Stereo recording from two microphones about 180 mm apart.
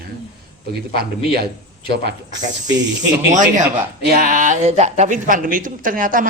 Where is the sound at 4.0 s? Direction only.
50° right (ahead or behind).